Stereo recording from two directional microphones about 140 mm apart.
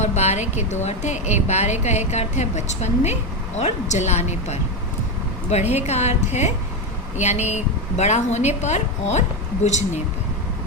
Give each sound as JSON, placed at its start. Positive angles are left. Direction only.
{"t": 0.0, "sound": "a woman's voice", "side_deg": 55}